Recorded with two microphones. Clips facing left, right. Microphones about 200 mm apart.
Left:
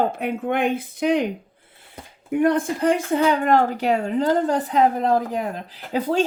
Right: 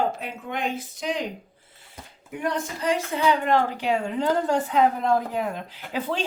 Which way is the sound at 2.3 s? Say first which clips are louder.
Left 9 dB; 55° left (ahead or behind).